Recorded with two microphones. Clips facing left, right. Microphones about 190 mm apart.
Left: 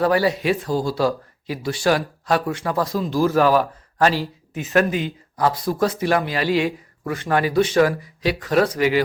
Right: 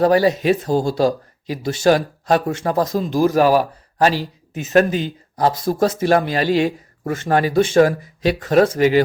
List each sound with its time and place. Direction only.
0.0 s speech: 40° right (ahead or behind)
0.7 s speech: 25° right (ahead or behind)
0.9 s speech: 45° right (ahead or behind)
2.3 s speech: 25° right (ahead or behind)
2.6 s speech: 40° right (ahead or behind)
3.0 s speech: 20° right (ahead or behind)
4.6 s speech: 35° right (ahead or behind)
5.5 s speech: 45° right (ahead or behind)